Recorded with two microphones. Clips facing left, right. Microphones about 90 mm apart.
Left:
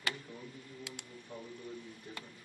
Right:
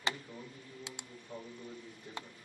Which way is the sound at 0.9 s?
20° right (ahead or behind).